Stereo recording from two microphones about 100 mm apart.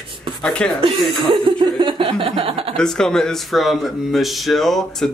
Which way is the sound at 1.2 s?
55° right (ahead or behind).